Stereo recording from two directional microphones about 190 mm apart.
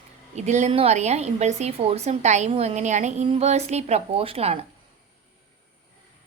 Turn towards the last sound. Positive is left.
turn(degrees=-30)  # may be behind; listen again after turning